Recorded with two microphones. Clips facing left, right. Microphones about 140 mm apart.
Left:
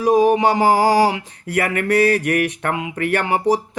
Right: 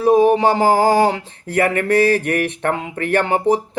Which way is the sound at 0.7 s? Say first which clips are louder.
Even; 50° right (ahead or behind).